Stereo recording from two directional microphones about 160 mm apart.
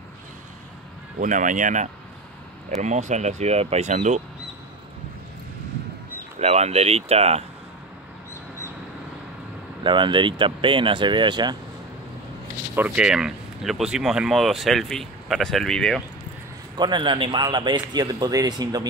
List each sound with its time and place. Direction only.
1.2 s speech: 55° right (ahead or behind)
6.4 s speech: 40° right (ahead or behind)
9.8 s speech: 30° right (ahead or behind)
12.7 s speech: 10° right (ahead or behind)
16.7 s speech: 30° right (ahead or behind)